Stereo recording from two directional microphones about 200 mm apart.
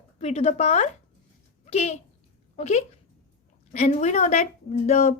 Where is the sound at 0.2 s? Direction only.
30° left (ahead or behind).